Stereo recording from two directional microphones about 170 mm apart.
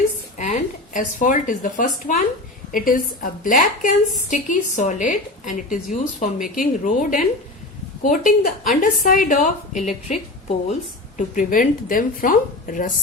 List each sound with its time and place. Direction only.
0.3 s speech: 45° left (ahead or behind)
11.2 s speech: 50° left (ahead or behind)